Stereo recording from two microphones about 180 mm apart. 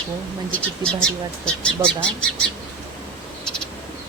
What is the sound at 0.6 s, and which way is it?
Speech, 5° left (ahead or behind).